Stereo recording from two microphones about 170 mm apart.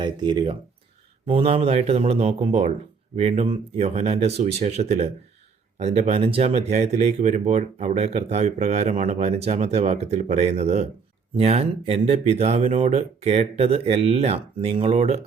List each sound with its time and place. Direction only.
0.0 s speech: 25° right (ahead or behind)